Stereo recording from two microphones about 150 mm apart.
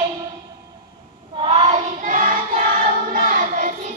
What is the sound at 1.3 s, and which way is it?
Child singing, 40° right (ahead or behind).